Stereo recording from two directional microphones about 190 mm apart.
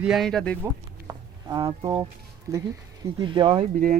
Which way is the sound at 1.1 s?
20° right (ahead or behind).